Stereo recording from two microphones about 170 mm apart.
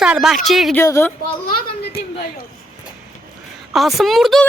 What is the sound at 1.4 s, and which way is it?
Speech, 65° left (ahead or behind).